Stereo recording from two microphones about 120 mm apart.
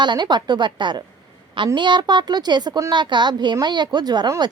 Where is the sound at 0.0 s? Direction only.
40° right (ahead or behind).